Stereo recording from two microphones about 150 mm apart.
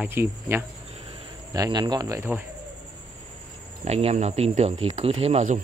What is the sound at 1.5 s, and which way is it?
Speech, 25° right (ahead or behind).